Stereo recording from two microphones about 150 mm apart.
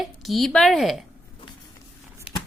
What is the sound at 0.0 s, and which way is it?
Speech, centre (ahead or behind).